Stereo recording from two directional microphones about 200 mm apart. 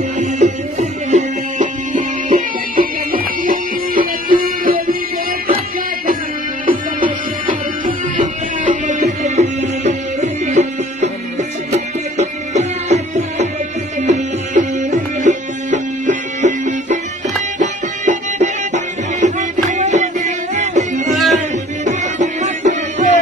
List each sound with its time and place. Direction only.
0.2 s music: 35° right (ahead or behind)
6.6 s music: 45° right (ahead or behind)